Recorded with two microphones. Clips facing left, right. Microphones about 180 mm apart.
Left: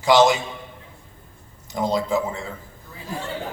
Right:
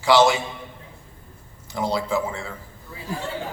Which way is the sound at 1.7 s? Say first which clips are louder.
Left 2 dB; 20° left (ahead or behind).